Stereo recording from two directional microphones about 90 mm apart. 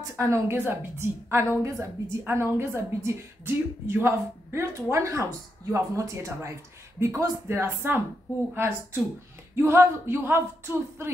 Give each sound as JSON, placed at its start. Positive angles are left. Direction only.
{"t": 0.0, "sound": "a woman's voice", "side_deg": -35}